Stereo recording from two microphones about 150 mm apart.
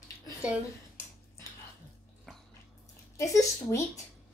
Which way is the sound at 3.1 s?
20° left (ahead or behind).